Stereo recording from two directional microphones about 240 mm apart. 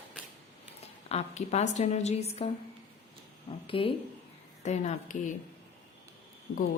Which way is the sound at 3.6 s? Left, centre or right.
Left.